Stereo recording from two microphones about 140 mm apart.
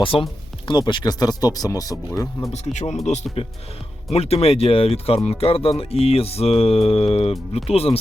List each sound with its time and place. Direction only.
0.0 s speech: 40° left (ahead or behind); by 2.0 s 25° left (ahead or behind)
2.5 s speech: 50° left (ahead or behind)